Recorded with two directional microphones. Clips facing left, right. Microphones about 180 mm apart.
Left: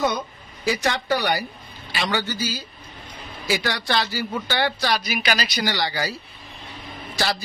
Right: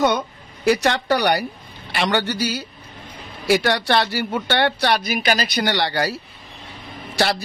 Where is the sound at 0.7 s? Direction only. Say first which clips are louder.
Right 5 dB; 70° right (ahead or behind).